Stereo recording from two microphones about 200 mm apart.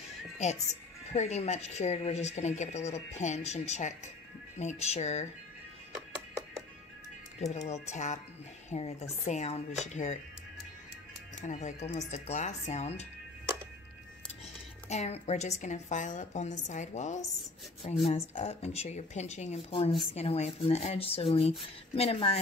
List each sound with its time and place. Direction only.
0.4 s speech: 35° left (ahead or behind)
7.3 s speech: 35° left (ahead or behind)
11.4 s speech: 35° left (ahead or behind)
14.9 s speech: 35° left (ahead or behind)